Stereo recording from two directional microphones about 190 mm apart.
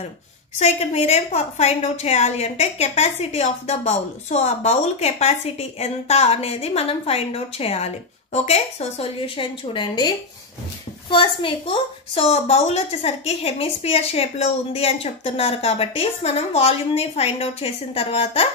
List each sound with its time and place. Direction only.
0.6 s a woman's voice: 35° left (ahead or behind)